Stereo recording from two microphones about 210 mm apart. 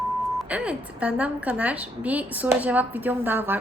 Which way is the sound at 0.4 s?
5° right (ahead or behind).